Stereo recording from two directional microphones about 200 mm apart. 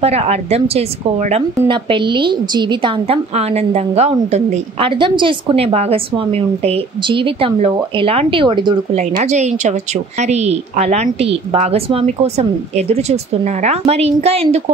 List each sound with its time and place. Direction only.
0.0 s a woman's voice: 30° right (ahead or behind)
9.2 s speech: 35° right (ahead or behind)